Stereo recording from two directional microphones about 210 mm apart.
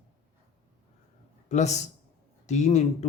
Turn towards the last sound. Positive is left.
turn(degrees=30)  # may be behind; listen again after turning